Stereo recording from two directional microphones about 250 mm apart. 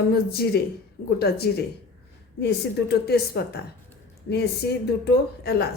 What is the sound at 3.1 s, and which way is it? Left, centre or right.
Speech, left.